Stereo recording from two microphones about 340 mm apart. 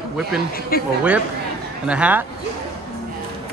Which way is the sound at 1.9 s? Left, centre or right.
Centre.